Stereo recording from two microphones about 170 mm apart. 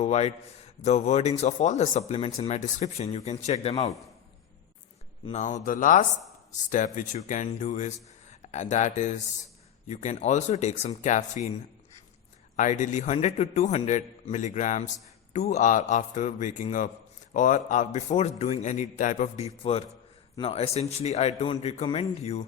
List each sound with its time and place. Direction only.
0.0 s speech: 40° left (ahead or behind)
5.3 s speech: 45° left (ahead or behind)
12.5 s speech: 45° left (ahead or behind)
19.7 s speech: 35° left (ahead or behind)